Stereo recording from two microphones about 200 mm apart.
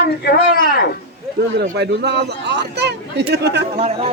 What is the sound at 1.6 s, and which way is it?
Speech, 55° right (ahead or behind).